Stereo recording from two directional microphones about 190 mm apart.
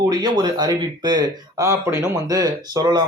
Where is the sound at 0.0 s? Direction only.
20° right (ahead or behind).